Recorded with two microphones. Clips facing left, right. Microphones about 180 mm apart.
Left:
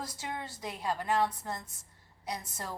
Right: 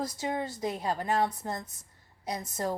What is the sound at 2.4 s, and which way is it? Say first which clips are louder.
Speech: right 9 dB; 20° right (ahead or behind).